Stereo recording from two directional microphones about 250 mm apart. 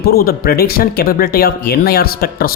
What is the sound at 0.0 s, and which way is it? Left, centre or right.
Speech, left.